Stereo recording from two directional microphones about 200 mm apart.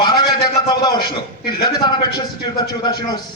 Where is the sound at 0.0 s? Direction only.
20° left (ahead or behind).